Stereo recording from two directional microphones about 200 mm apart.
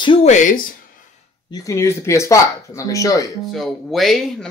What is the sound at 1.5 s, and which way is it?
Speech, 15° left (ahead or behind).